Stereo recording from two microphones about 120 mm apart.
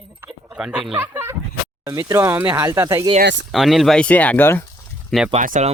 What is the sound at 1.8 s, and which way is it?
Speech, 25° right (ahead or behind).